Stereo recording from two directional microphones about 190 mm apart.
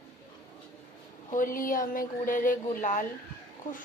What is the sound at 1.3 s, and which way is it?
Speech, 45° left (ahead or behind).